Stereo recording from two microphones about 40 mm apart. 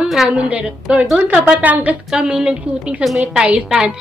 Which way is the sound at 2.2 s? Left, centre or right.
Right.